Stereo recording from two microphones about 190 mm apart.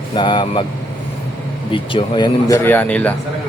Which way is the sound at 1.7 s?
25° left (ahead or behind).